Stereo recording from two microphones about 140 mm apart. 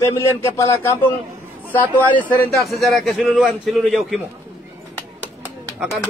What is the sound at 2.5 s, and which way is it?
A man's voice, centre (ahead or behind).